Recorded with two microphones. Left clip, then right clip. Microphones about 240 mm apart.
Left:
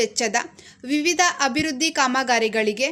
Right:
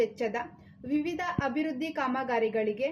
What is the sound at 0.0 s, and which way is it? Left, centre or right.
A woman's voice, left.